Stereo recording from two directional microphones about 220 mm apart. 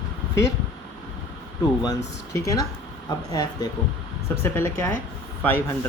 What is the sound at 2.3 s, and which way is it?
Speech, 15° left (ahead or behind).